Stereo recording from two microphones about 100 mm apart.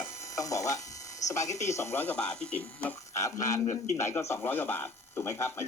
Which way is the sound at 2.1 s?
10° left (ahead or behind).